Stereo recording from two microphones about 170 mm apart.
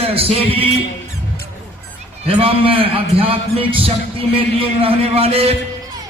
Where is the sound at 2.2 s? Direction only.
35° right (ahead or behind).